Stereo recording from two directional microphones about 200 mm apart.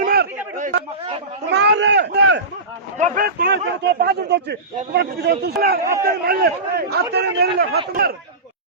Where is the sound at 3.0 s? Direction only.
40° right (ahead or behind).